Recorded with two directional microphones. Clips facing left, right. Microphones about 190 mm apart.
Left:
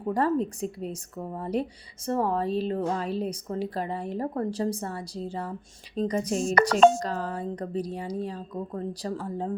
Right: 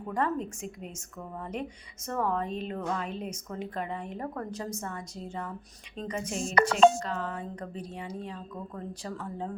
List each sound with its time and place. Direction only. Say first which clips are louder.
0.1 s a woman's voice: left 6 dB; 35° left (ahead or behind)